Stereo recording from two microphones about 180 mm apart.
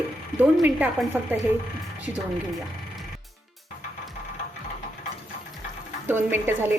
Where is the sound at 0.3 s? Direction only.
10° right (ahead or behind).